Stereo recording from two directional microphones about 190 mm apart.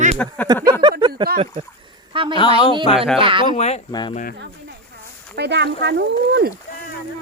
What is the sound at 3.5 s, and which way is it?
Speech, 35° left (ahead or behind).